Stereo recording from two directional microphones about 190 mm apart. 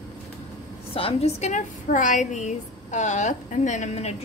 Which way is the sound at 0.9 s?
30° left (ahead or behind).